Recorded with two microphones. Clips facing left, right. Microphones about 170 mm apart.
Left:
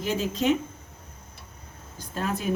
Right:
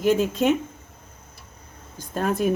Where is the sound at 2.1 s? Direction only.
50° right (ahead or behind).